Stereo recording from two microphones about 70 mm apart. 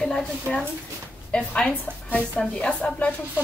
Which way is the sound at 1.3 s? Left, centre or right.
Centre.